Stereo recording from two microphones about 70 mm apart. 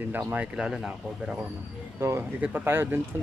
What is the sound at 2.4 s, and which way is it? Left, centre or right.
Speech, right.